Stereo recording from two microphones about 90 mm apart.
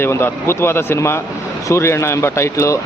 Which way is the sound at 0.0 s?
25° left (ahead or behind).